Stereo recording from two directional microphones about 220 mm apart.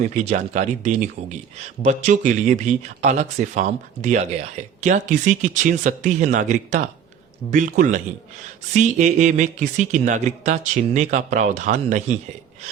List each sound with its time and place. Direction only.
0.0 s speech: 30° right (ahead or behind)